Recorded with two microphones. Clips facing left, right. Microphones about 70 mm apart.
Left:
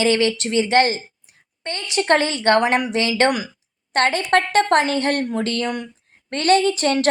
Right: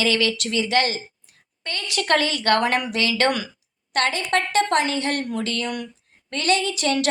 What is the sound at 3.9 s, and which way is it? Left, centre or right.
A woman's voice, left.